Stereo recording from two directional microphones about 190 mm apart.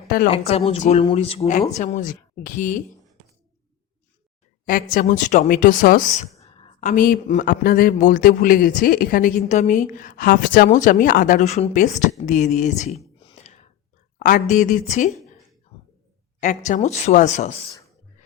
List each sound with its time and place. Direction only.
0.3 s speech: 30° left (ahead or behind)
1.8 s speech: 40° left (ahead or behind)
4.6 s speech: 50° left (ahead or behind)
13.3 s whispering: 35° left (ahead or behind)
14.2 s speech: 45° left (ahead or behind)
16.4 s speech: 40° left (ahead or behind)